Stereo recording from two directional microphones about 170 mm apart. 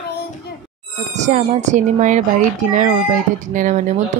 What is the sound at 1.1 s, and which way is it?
Speech, 45° right (ahead or behind).